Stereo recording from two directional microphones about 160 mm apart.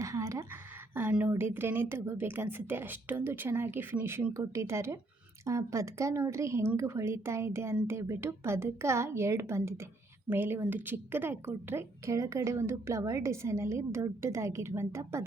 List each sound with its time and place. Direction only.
0.0 s a woman's voice: 20° right (ahead or behind)